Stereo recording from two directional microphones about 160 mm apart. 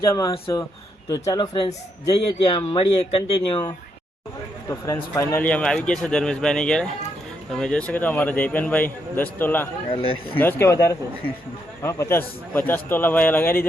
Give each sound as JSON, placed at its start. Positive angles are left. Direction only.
{"t": 0.1, "sound": "speech", "side_deg": 20}
{"t": 5.1, "sound": "a man's voice", "side_deg": 15}
{"t": 9.9, "sound": "speech", "side_deg": 35}
{"t": 10.3, "sound": "a man's voice", "side_deg": 15}